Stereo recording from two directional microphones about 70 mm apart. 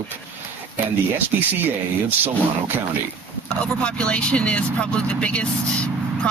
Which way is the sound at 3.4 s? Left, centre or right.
Centre.